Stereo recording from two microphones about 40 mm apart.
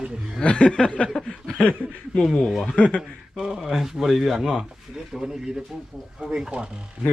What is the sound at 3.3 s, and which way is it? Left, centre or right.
Speech, centre.